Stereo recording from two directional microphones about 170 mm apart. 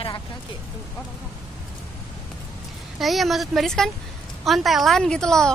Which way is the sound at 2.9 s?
Centre (ahead or behind).